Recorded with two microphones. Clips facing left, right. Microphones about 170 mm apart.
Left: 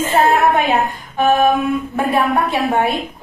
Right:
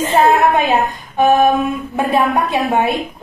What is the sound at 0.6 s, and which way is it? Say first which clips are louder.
A woman's voice: right 1 dB; 15° right (ahead or behind).